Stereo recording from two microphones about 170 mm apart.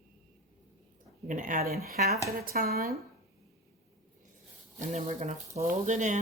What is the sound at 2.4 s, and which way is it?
Speech, 60° right (ahead or behind).